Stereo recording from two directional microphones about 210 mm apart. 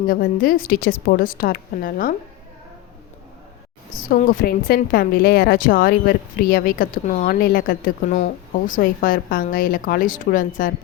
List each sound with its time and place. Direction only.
0.1 s a woman's voice: 45° left (ahead or behind)
3.9 s a woman's voice: 40° left (ahead or behind)